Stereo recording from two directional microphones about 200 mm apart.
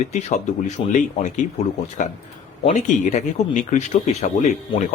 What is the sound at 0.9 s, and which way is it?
Speech, 40° left (ahead or behind).